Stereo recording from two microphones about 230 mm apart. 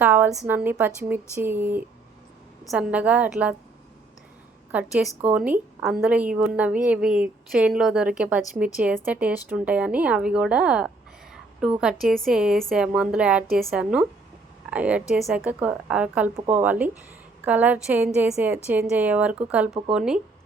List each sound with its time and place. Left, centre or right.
0.0 s a woman's voice: centre
4.7 s a woman's voice: centre